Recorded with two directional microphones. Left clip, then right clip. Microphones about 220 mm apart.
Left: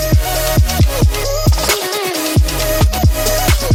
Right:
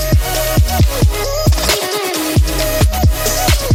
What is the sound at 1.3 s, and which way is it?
Music, centre (ahead or behind).